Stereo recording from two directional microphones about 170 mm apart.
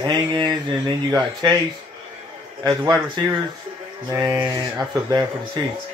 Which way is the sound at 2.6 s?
25° right (ahead or behind).